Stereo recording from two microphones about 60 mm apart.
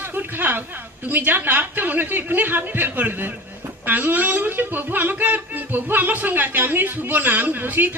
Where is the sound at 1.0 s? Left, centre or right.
Right.